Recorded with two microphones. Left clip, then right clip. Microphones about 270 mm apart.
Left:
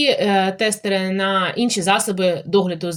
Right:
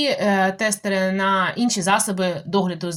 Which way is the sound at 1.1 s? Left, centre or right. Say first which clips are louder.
Even; right.